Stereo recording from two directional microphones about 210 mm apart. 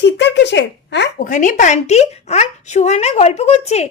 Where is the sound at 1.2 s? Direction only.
40° left (ahead or behind).